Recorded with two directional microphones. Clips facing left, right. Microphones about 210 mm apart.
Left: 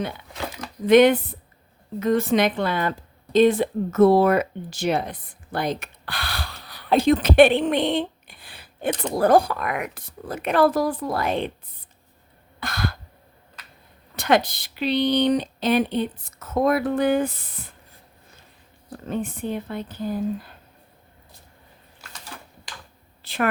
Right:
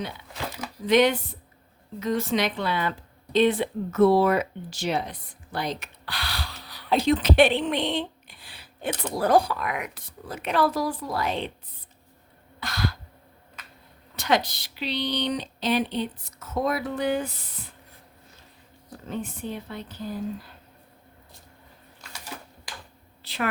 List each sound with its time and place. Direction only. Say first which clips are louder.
0.9 s speech: left 6 dB; 55° left (ahead or behind)
12.5 s a sound: left 1 dB; 55° left (ahead or behind)
14.2 s speech: left 4 dB; 55° left (ahead or behind)
18.9 s speech: left 5 dB; 55° left (ahead or behind)
23.2 s a woman's voice: left 5 dB; 50° left (ahead or behind)